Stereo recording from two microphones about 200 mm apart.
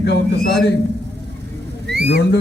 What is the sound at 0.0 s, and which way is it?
Speech, 60° left (ahead or behind).